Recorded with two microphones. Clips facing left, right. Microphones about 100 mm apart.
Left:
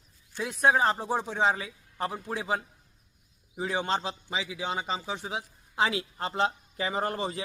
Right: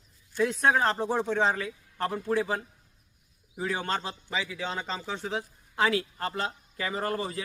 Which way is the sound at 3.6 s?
20° left (ahead or behind).